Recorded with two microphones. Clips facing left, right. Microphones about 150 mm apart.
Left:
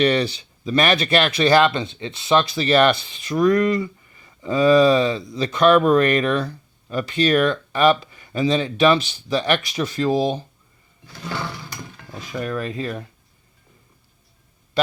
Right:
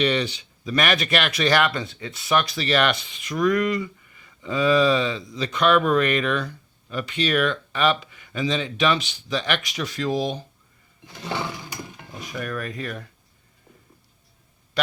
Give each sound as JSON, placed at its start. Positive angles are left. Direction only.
{"t": 0.0, "sound": "speech", "side_deg": 40}
{"t": 11.0, "sound": "sewing machine", "side_deg": -15}
{"t": 12.4, "sound": "speech", "side_deg": 25}